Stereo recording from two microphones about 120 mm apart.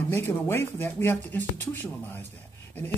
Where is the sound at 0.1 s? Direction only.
15° left (ahead or behind).